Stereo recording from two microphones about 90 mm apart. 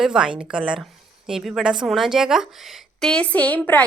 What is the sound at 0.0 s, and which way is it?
A woman's voice, 10° right (ahead or behind).